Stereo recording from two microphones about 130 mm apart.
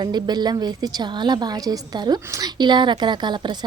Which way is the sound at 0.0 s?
35° right (ahead or behind).